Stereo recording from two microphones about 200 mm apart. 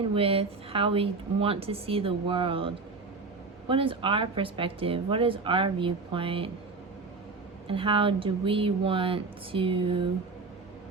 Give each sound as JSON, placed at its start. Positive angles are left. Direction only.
{"t": 0.1, "sound": "a woman's voice", "side_deg": -30}
{"t": 7.7, "sound": "a woman's voice", "side_deg": -25}